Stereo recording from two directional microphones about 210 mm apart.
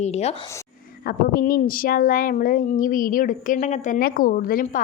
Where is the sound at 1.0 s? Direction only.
45° left (ahead or behind).